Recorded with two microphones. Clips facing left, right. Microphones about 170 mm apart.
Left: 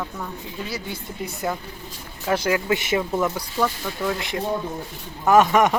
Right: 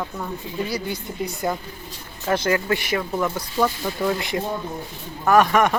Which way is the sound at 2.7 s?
20° left (ahead or behind).